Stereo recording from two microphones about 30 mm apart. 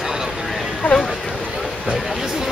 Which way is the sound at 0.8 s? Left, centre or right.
Left.